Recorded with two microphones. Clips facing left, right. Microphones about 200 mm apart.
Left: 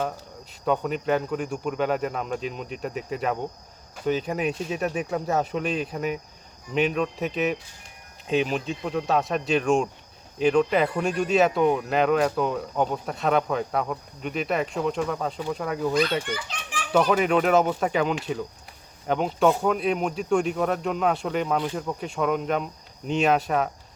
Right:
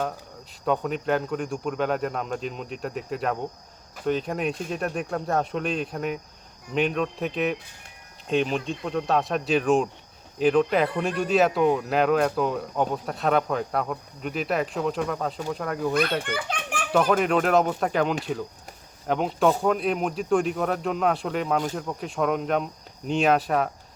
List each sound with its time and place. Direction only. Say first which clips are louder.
0.6 s speech: even; centre (ahead or behind)
16.2 s a child's voice: right 3 dB; 55° right (ahead or behind)
16.9 s speech: left 1 dB; centre (ahead or behind)